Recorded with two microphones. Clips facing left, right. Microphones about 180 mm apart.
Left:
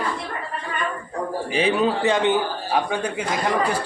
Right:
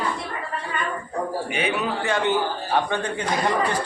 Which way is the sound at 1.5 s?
30° left (ahead or behind).